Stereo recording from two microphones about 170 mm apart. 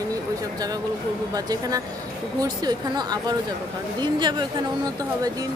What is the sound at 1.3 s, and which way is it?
Speech, 20° right (ahead or behind).